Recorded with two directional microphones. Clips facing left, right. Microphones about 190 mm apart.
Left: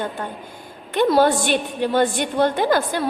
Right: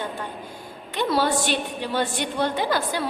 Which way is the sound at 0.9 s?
50° left (ahead or behind).